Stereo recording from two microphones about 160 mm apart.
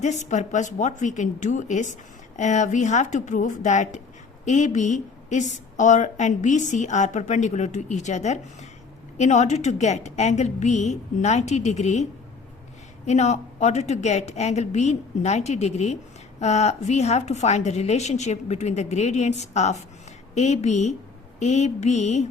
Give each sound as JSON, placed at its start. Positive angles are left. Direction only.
{"t": 0.0, "sound": "speech", "side_deg": 45}
{"t": 13.1, "sound": "speech", "side_deg": 45}